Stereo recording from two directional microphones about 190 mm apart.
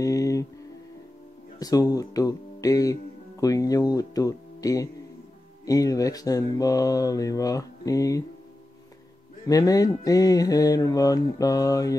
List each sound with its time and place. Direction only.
0.0 s music: 15° left (ahead or behind)
1.6 s speech: 20° left (ahead or behind)
9.5 s mantra: 20° left (ahead or behind)